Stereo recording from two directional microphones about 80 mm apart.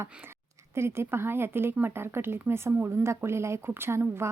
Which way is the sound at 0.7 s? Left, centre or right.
Right.